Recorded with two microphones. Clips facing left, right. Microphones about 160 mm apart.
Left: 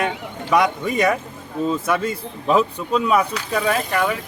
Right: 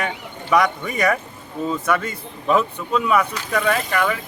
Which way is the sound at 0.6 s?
25° left (ahead or behind).